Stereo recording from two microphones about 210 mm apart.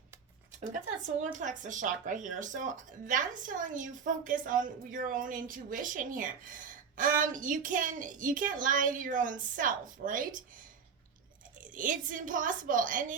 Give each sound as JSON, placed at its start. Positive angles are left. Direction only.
{"t": 1.2, "sound": "speech", "side_deg": -35}
{"t": 11.6, "sound": "speech", "side_deg": -40}